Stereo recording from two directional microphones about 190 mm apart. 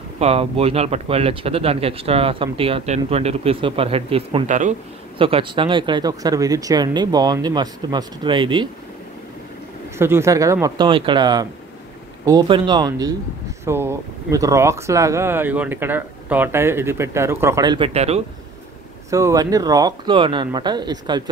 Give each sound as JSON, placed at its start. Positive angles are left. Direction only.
{"t": 0.2, "sound": "speech", "side_deg": -30}
{"t": 4.5, "sound": "speech", "side_deg": -40}
{"t": 5.2, "sound": "speech", "side_deg": -25}
{"t": 9.9, "sound": "speech", "side_deg": -15}
{"t": 19.0, "sound": "speech", "side_deg": -15}